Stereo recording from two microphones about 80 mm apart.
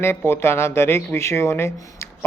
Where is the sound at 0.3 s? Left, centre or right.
Left.